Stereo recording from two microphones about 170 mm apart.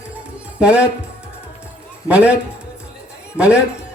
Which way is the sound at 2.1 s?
5° right (ahead or behind).